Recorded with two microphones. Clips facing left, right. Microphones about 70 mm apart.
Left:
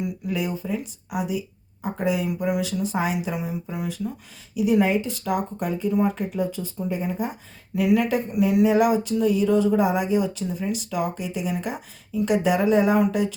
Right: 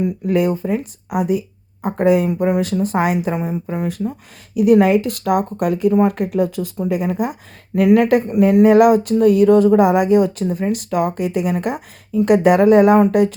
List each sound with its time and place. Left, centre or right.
0.0 s speech: right
4.5 s speech: right
7.8 s speech: right